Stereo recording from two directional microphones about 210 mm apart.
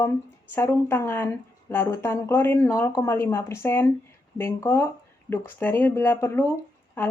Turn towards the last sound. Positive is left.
turn(degrees=10)  # may be behind; listen again after turning